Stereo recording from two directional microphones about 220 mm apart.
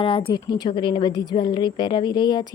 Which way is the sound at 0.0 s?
25° left (ahead or behind).